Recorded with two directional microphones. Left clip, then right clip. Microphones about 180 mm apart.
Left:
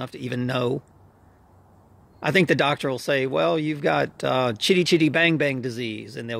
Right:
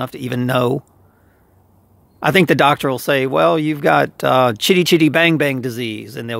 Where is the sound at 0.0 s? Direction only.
45° right (ahead or behind).